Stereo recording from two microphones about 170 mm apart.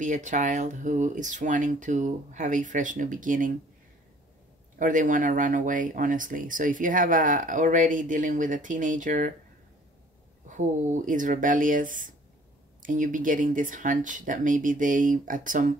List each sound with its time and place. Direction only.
0.0 s speech: 50° right (ahead or behind)
4.7 s speech: 50° right (ahead or behind)
10.5 s speech: 45° right (ahead or behind)